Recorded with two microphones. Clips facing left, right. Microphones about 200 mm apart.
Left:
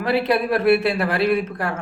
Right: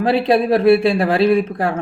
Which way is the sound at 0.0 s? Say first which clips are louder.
Right 5 dB; 30° right (ahead or behind).